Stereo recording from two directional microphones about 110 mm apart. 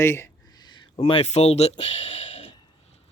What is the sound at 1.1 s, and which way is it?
Speech, 70° left (ahead or behind).